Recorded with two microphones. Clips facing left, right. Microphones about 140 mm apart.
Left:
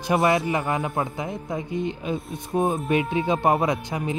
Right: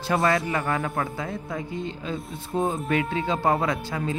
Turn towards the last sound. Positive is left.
turn(degrees=20)  # may be behind; listen again after turning